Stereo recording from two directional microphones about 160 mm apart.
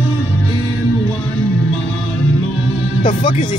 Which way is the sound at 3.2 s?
30° left (ahead or behind).